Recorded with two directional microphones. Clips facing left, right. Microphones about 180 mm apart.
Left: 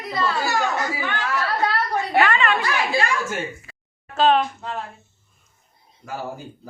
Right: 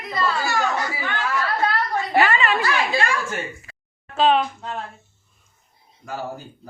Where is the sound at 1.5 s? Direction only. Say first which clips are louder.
Even; 15° left (ahead or behind).